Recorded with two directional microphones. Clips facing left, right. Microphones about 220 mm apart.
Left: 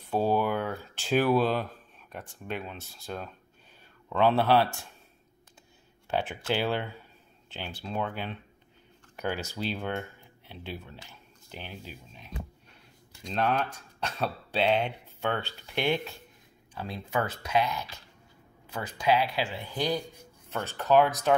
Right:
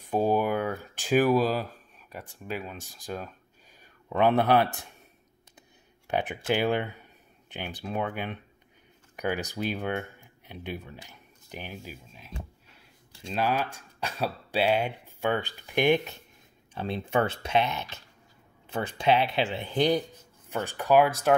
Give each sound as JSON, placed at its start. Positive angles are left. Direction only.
{"t": 0.1, "sound": "speech", "side_deg": -15}
{"t": 6.0, "sound": "speech", "side_deg": -15}
{"t": 13.3, "sound": "speech", "side_deg": -5}
{"t": 20.4, "sound": "speech", "side_deg": -10}